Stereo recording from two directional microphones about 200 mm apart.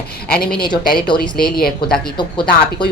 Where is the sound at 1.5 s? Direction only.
50° left (ahead or behind).